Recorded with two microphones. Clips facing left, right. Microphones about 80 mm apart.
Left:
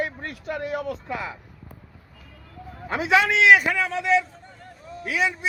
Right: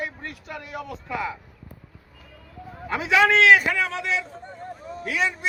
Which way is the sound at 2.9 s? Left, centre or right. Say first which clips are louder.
Left 1 dB; left.